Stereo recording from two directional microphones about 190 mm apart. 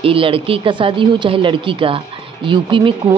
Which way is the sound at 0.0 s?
30° right (ahead or behind).